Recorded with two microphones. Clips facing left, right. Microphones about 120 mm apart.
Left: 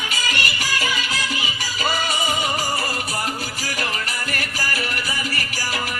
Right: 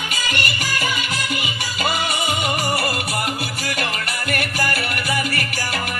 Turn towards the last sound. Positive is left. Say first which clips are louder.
# right 4 dB
turn(degrees=-60)  # may be behind; listen again after turning